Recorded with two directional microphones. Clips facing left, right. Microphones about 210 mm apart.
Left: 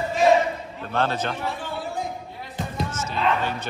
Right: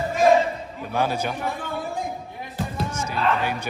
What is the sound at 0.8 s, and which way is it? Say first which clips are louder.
Speech: even; 10° right (ahead or behind).